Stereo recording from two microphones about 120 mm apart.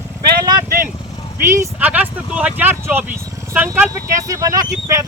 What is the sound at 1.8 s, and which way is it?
Speech, 10° right (ahead or behind).